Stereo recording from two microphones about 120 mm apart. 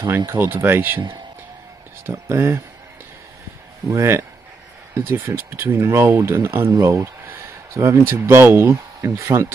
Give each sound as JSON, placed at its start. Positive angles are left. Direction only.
{"t": 0.3, "sound": "speech", "side_deg": -15}
{"t": 2.0, "sound": "speech", "side_deg": -25}
{"t": 3.9, "sound": "speech", "side_deg": -20}